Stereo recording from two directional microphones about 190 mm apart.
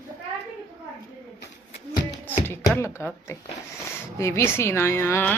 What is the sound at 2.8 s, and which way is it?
Speech, 15° left (ahead or behind).